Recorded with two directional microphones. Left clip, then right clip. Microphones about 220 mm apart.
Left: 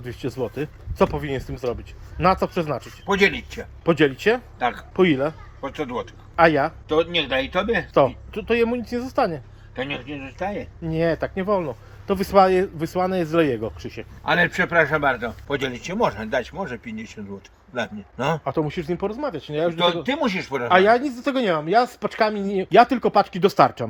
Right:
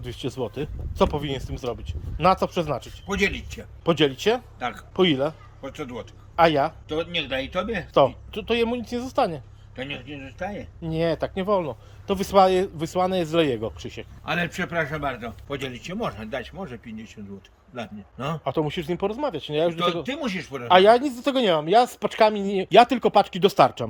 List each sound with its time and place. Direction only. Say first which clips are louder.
0.0 s speech: left 2 dB; centre (ahead or behind)
18.2 s speech: left 3 dB; 5° right (ahead or behind)